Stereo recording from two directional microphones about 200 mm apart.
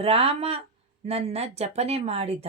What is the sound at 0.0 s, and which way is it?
Speech, 30° right (ahead or behind).